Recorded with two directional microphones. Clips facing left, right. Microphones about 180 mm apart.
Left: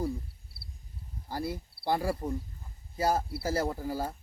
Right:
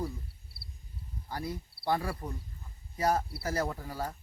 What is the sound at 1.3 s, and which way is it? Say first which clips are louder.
Speech: left 3 dB; 30° left (ahead or behind).